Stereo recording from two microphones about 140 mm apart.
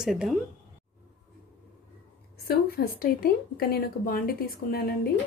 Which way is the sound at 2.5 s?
90° left.